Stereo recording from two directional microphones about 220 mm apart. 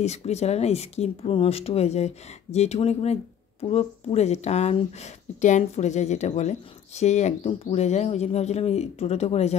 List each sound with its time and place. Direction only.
0.0 s speech: 30° left (ahead or behind)